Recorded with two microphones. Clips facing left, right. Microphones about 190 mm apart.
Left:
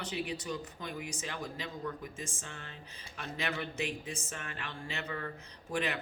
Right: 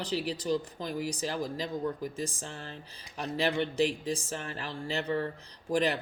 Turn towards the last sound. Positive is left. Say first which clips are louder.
# right 7 dB
turn(degrees=-35)  # may be behind; listen again after turning